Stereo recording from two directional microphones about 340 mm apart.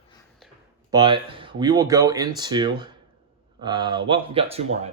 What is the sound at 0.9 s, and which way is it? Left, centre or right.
Speech, centre.